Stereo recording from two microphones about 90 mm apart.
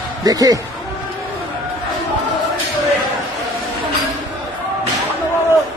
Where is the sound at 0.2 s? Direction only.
45° right (ahead or behind).